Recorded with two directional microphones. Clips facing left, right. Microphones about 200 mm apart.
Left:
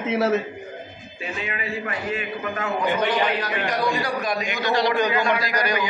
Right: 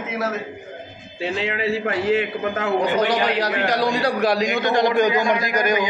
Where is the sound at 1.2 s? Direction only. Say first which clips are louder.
Right 7 dB; 90° right.